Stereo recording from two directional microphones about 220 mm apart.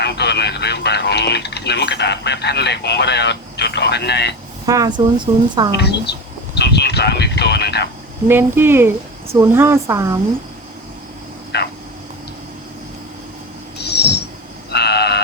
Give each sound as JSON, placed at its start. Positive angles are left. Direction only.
{"t": 0.0, "sound": "speech", "side_deg": 50}
{"t": 4.6, "sound": "speech", "side_deg": -15}
{"t": 5.7, "sound": "a woman's voice", "side_deg": 50}
{"t": 6.6, "sound": "a sound", "side_deg": 50}
{"t": 8.3, "sound": "speech", "side_deg": -10}
{"t": 11.5, "sound": "a sound", "side_deg": 50}
{"t": 13.7, "sound": "owl", "side_deg": 50}
{"t": 14.7, "sound": "vehicle", "side_deg": 50}